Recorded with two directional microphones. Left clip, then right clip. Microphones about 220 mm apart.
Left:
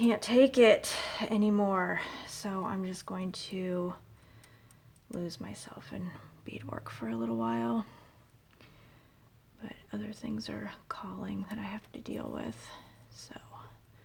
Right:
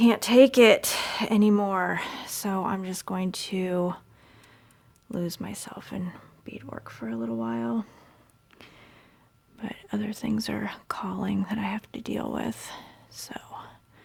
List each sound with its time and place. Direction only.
0.0 s speech: 40° right (ahead or behind)
5.1 s speech: 45° right (ahead or behind); by 7.9 s 15° right (ahead or behind)
8.5 s a sound: 40° right (ahead or behind)
9.6 s speech: 45° right (ahead or behind)